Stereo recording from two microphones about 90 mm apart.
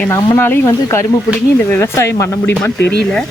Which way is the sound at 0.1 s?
25° left (ahead or behind).